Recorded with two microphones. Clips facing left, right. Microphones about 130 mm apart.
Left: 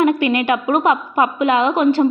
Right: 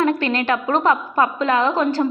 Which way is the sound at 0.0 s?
15° left (ahead or behind).